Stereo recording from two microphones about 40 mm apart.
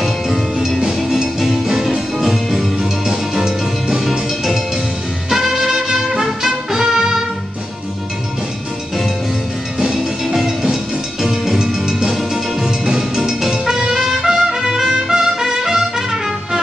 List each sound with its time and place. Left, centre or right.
0.0 s music: centre
5.3 s music: centre
9.8 s music: centre
13.9 s trumpet: centre